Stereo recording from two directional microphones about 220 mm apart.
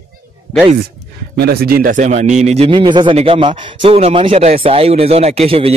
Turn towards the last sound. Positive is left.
turn(degrees=-25)  # may be behind; listen again after turning